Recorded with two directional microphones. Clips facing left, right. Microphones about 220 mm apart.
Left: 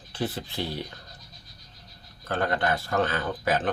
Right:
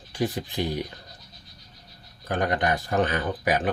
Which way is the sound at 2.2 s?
15° right (ahead or behind).